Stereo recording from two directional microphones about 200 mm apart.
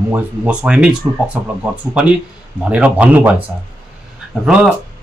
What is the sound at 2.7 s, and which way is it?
Speech, 5° right (ahead or behind).